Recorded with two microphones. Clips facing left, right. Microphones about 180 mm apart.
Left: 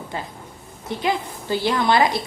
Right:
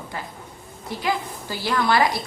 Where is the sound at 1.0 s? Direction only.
25° left (ahead or behind).